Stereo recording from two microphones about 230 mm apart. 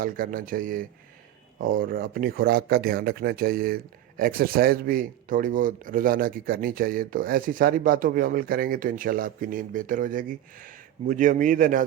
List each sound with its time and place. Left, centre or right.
0.0 s speech: right